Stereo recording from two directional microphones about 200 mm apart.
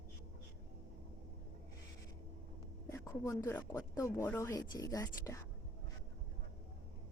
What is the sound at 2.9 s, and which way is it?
Speech, 15° left (ahead or behind).